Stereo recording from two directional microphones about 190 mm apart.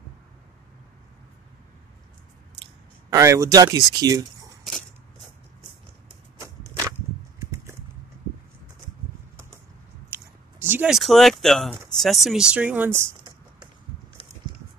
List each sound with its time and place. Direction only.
2.6 s speech: 15° right (ahead or behind)
6.4 s a sound: 15° right (ahead or behind)
10.0 s speech: 10° right (ahead or behind)